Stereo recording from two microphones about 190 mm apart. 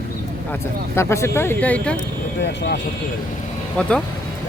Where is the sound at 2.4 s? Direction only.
65° left (ahead or behind).